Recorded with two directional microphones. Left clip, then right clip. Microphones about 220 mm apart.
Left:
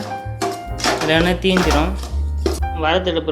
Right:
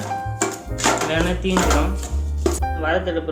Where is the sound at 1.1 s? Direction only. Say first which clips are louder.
Left 6 dB; 40° left (ahead or behind).